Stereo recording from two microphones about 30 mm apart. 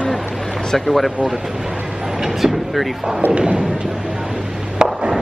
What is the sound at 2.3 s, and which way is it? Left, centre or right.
Vehicle, centre.